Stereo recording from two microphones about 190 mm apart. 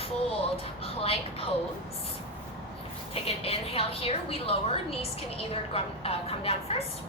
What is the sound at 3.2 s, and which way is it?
A woman's voice, 30° left (ahead or behind).